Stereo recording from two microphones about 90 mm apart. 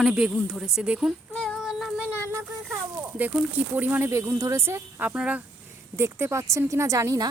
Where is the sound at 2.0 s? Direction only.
25° right (ahead or behind).